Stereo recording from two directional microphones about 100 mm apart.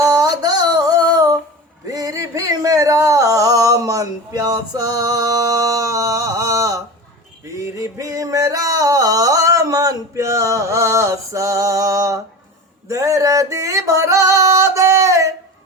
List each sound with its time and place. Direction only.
0.0 s a sound: 40° right (ahead or behind)
7.5 s music: 30° right (ahead or behind)
12.9 s female singing: 35° right (ahead or behind)